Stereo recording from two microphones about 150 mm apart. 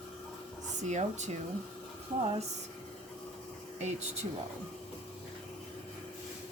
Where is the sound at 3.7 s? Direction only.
50° right (ahead or behind).